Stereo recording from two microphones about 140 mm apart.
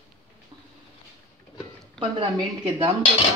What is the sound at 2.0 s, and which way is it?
Speech, 40° right (ahead or behind).